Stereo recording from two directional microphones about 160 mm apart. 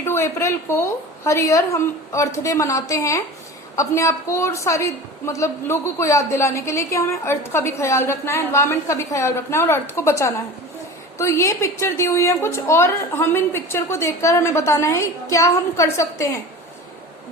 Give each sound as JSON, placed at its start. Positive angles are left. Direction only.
{"t": 0.0, "sound": "a woman's voice", "side_deg": 15}